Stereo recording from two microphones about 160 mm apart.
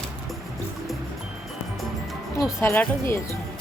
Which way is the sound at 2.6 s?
15° left (ahead or behind).